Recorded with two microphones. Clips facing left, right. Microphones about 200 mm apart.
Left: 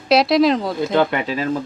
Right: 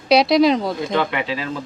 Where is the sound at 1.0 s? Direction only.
40° left (ahead or behind).